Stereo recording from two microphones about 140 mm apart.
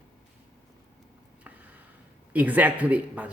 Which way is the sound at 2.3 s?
10° right (ahead or behind).